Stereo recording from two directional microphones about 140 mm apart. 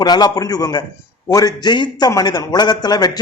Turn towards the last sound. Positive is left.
turn(degrees=30)  # may be behind; listen again after turning